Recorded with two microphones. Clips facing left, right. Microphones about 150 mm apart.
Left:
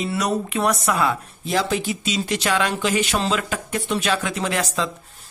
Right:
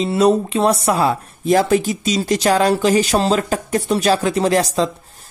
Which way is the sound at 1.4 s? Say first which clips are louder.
Right 9 dB; 50° right (ahead or behind).